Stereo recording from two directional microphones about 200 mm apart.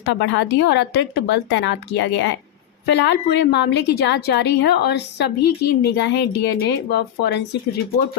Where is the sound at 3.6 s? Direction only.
55° left (ahead or behind).